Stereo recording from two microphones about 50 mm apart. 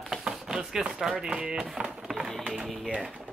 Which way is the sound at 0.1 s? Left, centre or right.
Centre.